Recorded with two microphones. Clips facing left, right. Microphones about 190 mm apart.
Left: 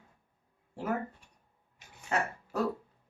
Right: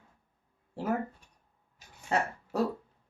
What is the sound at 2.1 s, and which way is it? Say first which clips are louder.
Dog: right 2 dB; 30° right (ahead or behind).